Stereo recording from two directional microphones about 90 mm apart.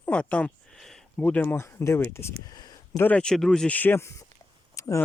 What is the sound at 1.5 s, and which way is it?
Speech, 30° left (ahead or behind).